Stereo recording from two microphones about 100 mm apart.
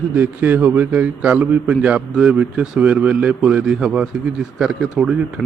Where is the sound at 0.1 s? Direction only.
20° right (ahead or behind).